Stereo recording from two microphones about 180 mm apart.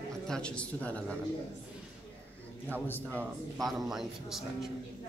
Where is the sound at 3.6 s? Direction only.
Centre (ahead or behind).